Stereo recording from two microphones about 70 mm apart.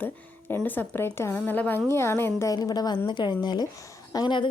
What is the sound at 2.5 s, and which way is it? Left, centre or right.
Speech, left.